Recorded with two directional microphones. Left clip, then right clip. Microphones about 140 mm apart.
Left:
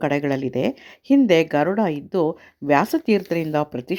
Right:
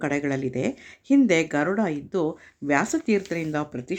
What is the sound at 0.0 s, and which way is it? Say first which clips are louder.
Speech: left 4 dB; 35° left (ahead or behind).